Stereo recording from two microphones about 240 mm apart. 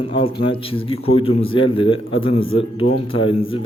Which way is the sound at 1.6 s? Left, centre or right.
Left.